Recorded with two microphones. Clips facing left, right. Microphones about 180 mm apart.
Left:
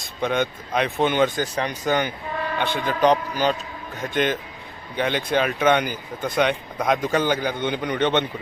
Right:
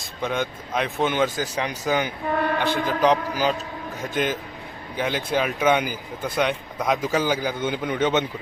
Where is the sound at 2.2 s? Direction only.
60° right (ahead or behind).